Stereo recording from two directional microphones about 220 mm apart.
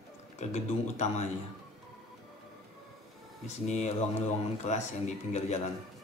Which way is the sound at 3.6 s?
30° left (ahead or behind).